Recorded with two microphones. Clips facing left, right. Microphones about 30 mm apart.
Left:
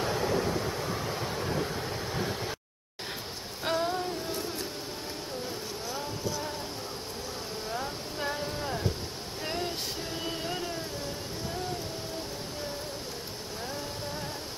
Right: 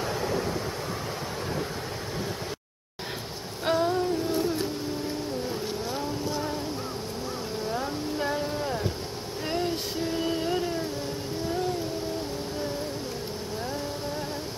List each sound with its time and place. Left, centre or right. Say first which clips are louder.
0.0 s vehicle: even; centre
3.6 s music: right 5 dB; centre
5.9 s vehicle: right 4 dB; right
7.7 s a sound: right 4 dB; centre
9.5 s female singing: right 5 dB; centre